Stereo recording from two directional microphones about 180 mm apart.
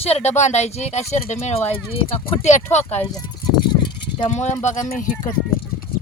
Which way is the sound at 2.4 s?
40° left (ahead or behind).